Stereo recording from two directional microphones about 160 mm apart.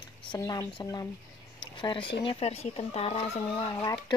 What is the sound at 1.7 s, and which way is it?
Speech, 30° left (ahead or behind).